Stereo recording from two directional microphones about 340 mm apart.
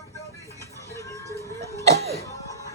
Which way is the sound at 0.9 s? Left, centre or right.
Centre.